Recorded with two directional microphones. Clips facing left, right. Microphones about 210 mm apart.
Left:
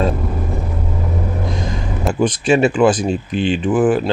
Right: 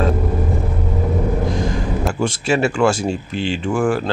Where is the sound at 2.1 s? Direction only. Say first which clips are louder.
Left 6 dB; 20° left (ahead or behind).